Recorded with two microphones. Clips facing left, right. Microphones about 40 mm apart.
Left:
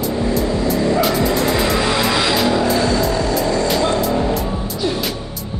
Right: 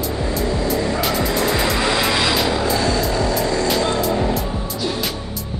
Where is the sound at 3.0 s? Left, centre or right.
Centre.